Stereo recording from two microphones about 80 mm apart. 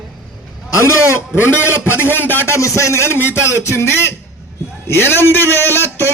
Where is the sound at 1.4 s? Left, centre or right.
Left.